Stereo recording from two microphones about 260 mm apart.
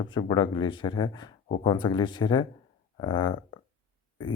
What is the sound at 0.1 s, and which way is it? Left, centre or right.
Mantra, centre.